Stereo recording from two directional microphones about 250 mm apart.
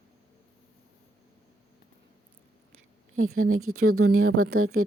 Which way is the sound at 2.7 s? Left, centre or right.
Right.